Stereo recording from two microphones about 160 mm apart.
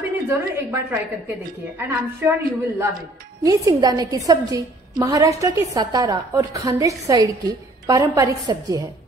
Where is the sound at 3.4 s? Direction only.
20° right (ahead or behind).